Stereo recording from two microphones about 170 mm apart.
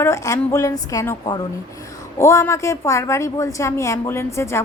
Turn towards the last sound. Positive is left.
turn(degrees=15)  # may be behind; listen again after turning